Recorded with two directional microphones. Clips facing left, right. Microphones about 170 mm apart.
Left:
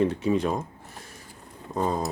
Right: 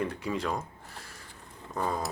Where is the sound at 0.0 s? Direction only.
20° left (ahead or behind).